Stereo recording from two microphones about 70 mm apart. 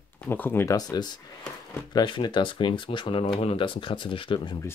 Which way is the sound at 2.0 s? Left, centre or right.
Left.